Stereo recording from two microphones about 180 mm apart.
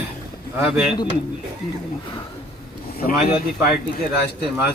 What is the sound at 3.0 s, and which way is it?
Speech, 55° left (ahead or behind).